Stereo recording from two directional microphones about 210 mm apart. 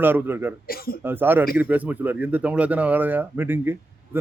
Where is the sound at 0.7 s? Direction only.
45° left (ahead or behind).